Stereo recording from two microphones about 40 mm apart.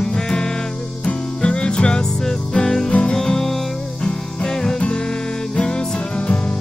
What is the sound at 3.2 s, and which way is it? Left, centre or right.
Music, centre.